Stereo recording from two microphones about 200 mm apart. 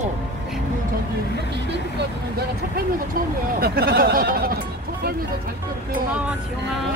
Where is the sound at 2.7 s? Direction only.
50° right (ahead or behind).